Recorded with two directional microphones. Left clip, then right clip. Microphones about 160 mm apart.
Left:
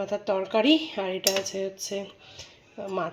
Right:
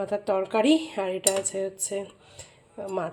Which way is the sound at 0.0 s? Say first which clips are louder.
Right 1 dB; 10° right (ahead or behind).